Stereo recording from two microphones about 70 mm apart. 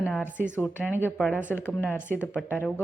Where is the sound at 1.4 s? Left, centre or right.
Left.